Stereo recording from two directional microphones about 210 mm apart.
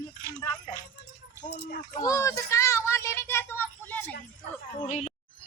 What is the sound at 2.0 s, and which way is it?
Speech, 15° left (ahead or behind).